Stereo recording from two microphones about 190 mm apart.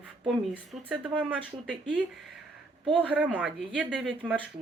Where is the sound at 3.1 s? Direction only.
5° right (ahead or behind).